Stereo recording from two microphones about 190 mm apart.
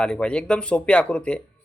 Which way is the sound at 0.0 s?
5° left (ahead or behind).